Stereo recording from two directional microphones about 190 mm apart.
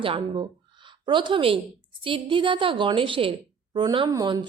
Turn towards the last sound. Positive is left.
turn(degrees=-20)  # may be behind; listen again after turning